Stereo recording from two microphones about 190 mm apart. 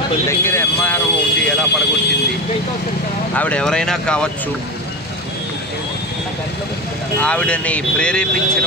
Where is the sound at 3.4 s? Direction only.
5° left (ahead or behind).